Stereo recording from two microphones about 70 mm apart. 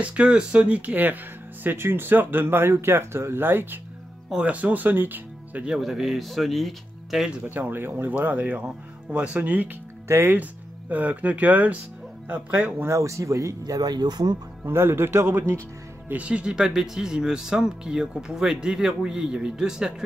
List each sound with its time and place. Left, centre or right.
0.0 s speech: centre
4.3 s speech: centre
5.7 s speech: centre
7.4 s speech: right
10.0 s speech: right
10.9 s speech: right
12.9 s speech: right
14.6 s speech: right
16.1 s speech: centre